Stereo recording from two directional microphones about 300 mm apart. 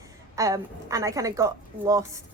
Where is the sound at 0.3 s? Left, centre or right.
Centre.